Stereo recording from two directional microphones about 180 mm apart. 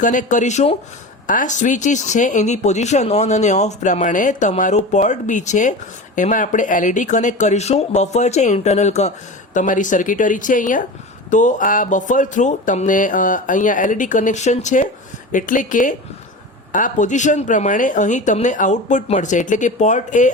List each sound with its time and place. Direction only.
0.0 s speech: 45° left (ahead or behind)